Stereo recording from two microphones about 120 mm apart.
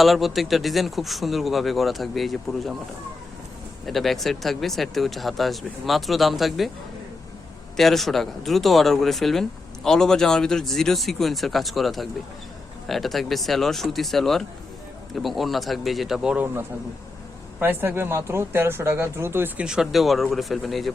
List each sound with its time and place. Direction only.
0.0 s speech: centre (ahead or behind)
3.8 s speech: centre (ahead or behind)
7.8 s speech: centre (ahead or behind); by 19.6 s 20° right (ahead or behind)
19.6 s speech: 5° right (ahead or behind)